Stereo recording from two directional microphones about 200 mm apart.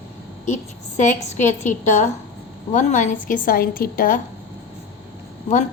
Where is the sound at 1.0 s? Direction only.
40° left (ahead or behind).